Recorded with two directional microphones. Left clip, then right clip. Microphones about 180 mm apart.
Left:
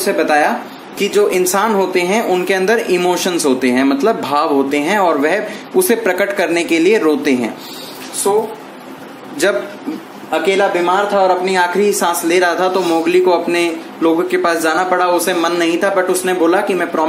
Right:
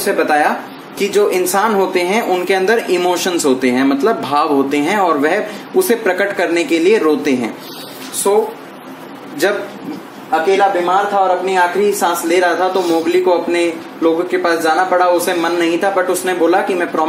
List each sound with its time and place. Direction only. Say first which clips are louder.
0.0 s a woman's voice: even; 15° left (ahead or behind)
11.1 s speech: even; 25° left (ahead or behind)